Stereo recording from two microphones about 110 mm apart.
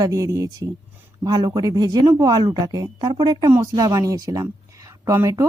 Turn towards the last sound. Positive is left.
turn(degrees=-30)  # may be behind; listen again after turning